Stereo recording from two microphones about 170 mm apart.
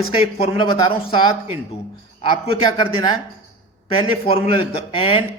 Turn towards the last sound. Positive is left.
turn(degrees=30)  # may be behind; listen again after turning